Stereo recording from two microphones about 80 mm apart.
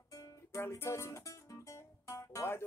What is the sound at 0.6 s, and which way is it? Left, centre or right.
Music, left.